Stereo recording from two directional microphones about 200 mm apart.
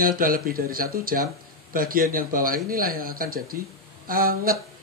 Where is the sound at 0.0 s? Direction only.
45° right (ahead or behind).